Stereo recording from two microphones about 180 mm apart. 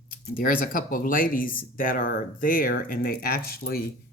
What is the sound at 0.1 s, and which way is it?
Speech, 50° left (ahead or behind).